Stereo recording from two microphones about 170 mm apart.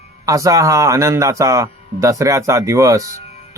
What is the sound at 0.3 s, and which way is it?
A man's voice, 20° right (ahead or behind).